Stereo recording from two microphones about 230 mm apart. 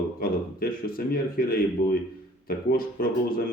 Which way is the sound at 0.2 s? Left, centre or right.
Left.